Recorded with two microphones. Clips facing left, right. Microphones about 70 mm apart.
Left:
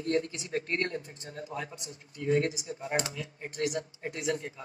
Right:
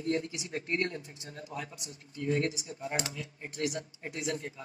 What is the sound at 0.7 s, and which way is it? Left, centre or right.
Speech, left.